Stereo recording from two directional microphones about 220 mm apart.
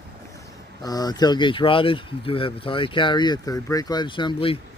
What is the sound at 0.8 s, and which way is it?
Speech, 15° left (ahead or behind).